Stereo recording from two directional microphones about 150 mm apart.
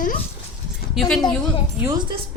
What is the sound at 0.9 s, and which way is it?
Speech, centre (ahead or behind).